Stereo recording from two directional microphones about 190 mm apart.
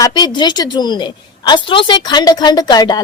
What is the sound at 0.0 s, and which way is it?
A woman's voice, 20° left (ahead or behind).